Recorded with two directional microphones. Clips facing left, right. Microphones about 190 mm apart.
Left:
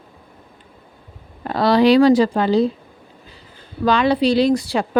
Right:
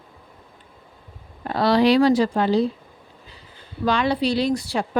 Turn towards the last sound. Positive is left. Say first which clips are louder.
# left 5 dB
turn(degrees=90)